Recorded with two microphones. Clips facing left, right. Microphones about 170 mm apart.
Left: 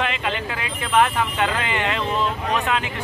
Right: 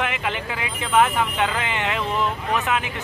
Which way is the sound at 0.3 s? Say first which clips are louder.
Left 1 dB; 15° right (ahead or behind).